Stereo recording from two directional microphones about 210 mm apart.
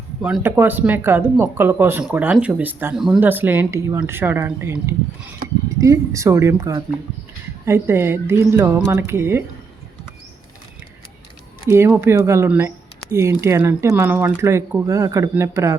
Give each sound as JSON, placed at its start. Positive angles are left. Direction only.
{"t": 0.2, "sound": "speech", "side_deg": -5}
{"t": 11.7, "sound": "speech", "side_deg": -10}